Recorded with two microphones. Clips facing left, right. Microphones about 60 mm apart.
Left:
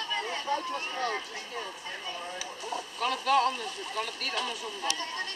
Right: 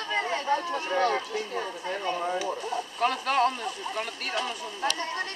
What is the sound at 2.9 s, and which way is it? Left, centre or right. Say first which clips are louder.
Speech: even; right.